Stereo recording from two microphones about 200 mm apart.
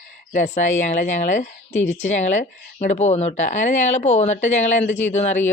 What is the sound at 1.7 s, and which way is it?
Speech, 75° left (ahead or behind).